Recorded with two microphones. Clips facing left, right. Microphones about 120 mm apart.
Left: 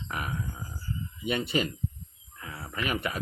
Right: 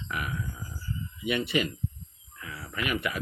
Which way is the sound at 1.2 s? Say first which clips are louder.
Right 1 dB; 35° left (ahead or behind).